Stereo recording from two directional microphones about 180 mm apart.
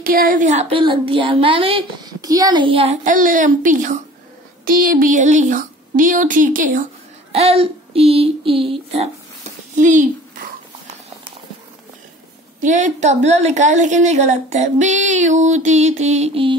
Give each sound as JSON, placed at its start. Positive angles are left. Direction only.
{"t": 0.0, "sound": "speech", "side_deg": -55}
{"t": 3.1, "sound": "speech", "side_deg": -50}
{"t": 7.3, "sound": "a woman's voice", "side_deg": -35}
{"t": 9.8, "sound": "speech", "side_deg": -45}
{"t": 12.5, "sound": "a woman's voice", "side_deg": -45}